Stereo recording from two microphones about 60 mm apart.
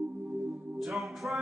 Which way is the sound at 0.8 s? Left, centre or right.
Centre.